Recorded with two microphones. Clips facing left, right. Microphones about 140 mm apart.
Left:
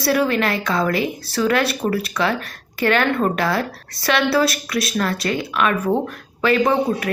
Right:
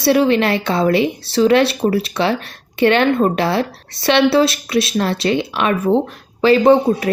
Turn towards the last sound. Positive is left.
turn(degrees=-30)  # may be behind; listen again after turning